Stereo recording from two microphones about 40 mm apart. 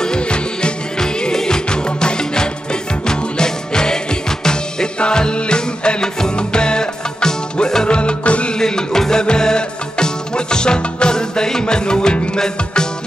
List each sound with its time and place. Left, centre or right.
0.0 s music: left
8.5 s music: centre